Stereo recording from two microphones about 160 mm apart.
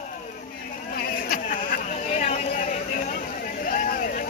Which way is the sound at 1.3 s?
55° left (ahead or behind).